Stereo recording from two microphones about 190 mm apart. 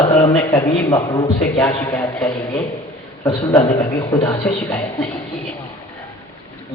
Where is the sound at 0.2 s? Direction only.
20° left (ahead or behind).